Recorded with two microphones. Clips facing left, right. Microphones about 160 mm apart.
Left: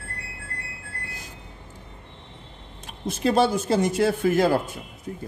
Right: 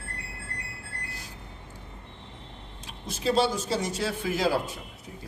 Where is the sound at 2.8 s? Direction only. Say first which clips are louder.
Left 4 dB; 55° left (ahead or behind).